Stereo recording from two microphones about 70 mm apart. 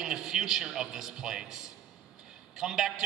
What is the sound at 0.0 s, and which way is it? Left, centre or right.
A man's voice, centre.